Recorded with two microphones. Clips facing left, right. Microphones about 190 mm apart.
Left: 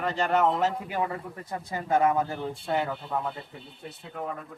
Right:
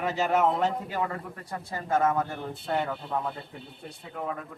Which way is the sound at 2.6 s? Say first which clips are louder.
Even; centre (ahead or behind).